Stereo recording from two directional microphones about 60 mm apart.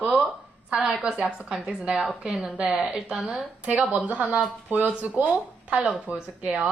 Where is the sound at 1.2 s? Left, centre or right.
Centre.